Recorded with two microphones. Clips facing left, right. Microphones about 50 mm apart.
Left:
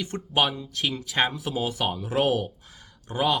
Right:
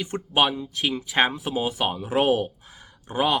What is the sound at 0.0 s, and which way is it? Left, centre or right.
Speech, centre.